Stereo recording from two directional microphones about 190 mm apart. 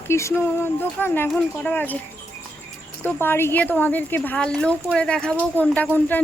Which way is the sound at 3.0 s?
10° left (ahead or behind).